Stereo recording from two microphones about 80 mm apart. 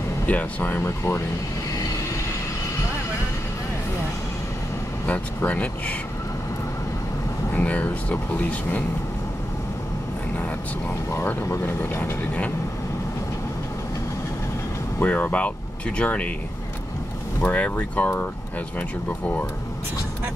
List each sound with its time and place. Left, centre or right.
0.3 s speech: centre
5.0 s speech: left
7.5 s speech: centre
11.6 s speech: left
15.0 s speech: centre
17.4 s speech: centre